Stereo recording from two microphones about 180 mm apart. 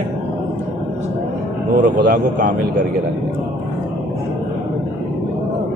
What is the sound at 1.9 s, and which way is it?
Speech, 70° right (ahead or behind).